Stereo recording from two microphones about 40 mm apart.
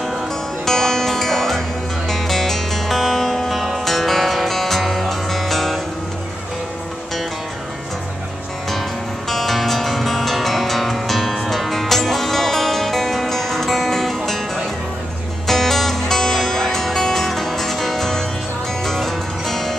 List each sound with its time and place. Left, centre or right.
0.7 s music: centre
9.3 s music: centre